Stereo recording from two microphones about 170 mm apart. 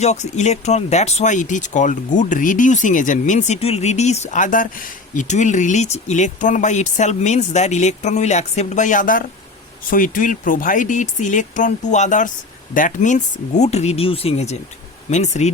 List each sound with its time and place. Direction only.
0.0 s speech: 40° left (ahead or behind)